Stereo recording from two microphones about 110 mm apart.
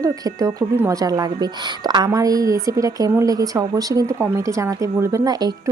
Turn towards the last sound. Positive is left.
turn(degrees=-35)  # may be behind; listen again after turning